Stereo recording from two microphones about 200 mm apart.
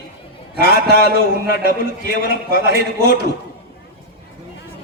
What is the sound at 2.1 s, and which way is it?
Speech, 50° left (ahead or behind).